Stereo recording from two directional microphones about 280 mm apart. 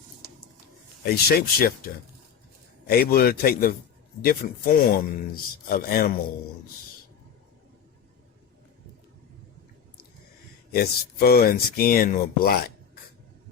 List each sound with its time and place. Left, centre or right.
1.0 s speech: left
10.7 s speech: left